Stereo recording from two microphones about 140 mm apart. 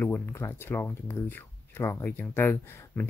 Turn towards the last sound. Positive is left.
turn(degrees=15)  # may be behind; listen again after turning